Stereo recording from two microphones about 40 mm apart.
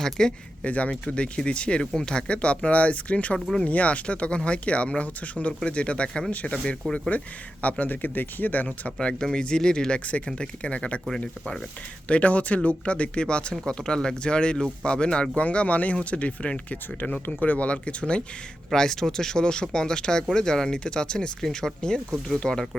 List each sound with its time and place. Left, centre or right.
0.0 s speech: centre
0.6 s speech: left
9.0 s speech: left
12.0 s speech: left
15.5 s speech: left
18.7 s speech: centre